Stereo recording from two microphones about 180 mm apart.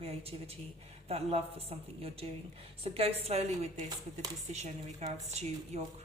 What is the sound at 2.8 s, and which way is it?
A woman's voice, 35° right (ahead or behind).